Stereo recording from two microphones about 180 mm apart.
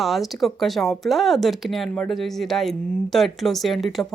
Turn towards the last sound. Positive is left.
turn(degrees=0)  # may be behind; listen again after turning